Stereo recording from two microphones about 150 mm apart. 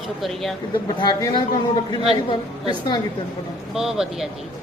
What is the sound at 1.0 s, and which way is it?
A man's voice, 30° left (ahead or behind).